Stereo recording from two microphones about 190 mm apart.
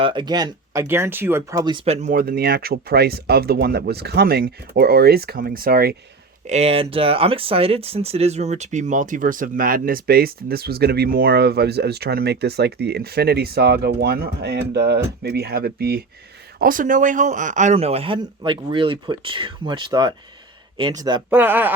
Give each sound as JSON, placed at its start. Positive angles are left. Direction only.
{"t": 0.0, "sound": "speech", "side_deg": -25}
{"t": 6.5, "sound": "speech", "side_deg": -30}